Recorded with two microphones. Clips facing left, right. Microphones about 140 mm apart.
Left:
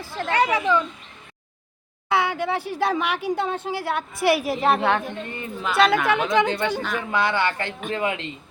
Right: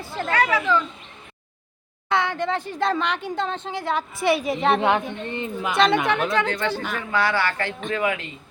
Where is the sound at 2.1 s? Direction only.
10° left (ahead or behind).